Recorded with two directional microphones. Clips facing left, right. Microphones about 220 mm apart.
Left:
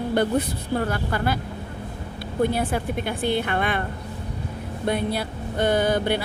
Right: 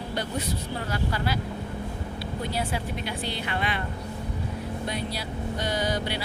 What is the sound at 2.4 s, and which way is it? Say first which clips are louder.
Speech: left 9 dB; 55° left (ahead or behind).